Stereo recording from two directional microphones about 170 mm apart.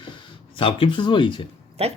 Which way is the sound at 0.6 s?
30° left (ahead or behind).